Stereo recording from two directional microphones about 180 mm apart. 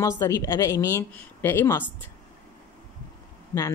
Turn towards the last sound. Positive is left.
turn(degrees=15)  # may be behind; listen again after turning